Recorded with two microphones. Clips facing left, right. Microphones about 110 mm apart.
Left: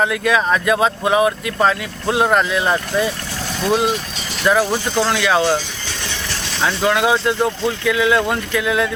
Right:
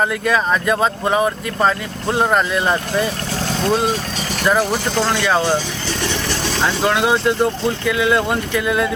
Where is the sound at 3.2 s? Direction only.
25° right (ahead or behind).